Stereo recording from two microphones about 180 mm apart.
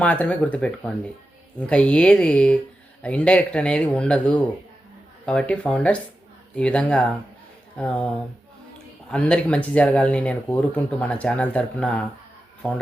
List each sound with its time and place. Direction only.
0.0 s speech: 5° left (ahead or behind)